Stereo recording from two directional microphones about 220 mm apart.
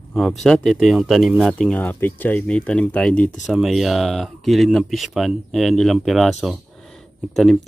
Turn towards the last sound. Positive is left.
turn(degrees=0)  # may be behind; listen again after turning